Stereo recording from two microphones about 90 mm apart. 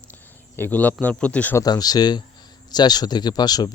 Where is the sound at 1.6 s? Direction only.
45° left (ahead or behind).